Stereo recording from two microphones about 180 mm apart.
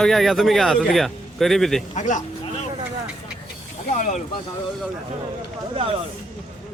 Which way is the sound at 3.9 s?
45° left (ahead or behind).